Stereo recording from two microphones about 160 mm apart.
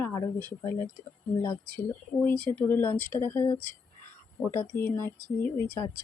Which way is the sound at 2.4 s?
10° left (ahead or behind).